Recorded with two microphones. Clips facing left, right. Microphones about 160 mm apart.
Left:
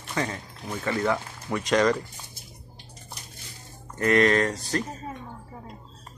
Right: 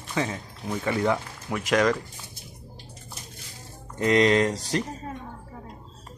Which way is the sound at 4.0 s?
20° right (ahead or behind).